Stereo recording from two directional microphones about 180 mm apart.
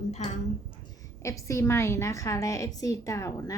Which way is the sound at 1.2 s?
15° left (ahead or behind).